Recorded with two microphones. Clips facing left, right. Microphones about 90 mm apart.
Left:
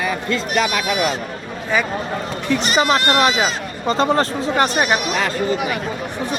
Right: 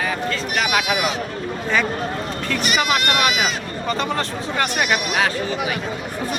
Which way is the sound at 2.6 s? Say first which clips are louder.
Left 3 dB; 30° left (ahead or behind).